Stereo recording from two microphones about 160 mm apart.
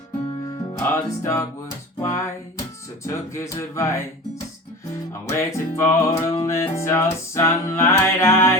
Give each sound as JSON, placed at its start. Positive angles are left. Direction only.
{"t": 0.4, "sound": "music", "side_deg": 20}
{"t": 3.3, "sound": "music", "side_deg": 20}
{"t": 5.2, "sound": "music", "side_deg": 15}